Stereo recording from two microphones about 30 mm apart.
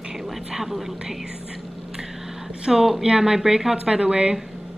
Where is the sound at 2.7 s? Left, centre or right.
Centre.